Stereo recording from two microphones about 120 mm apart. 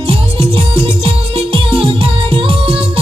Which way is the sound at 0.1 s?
50° right (ahead or behind).